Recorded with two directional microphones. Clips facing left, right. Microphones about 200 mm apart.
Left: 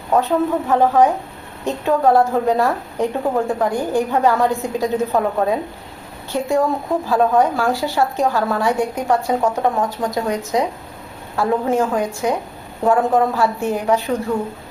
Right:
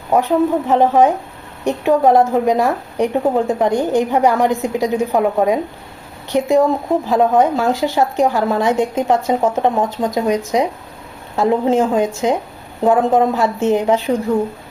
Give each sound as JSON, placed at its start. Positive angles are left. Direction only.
{"t": 0.1, "sound": "a woman's voice", "side_deg": -15}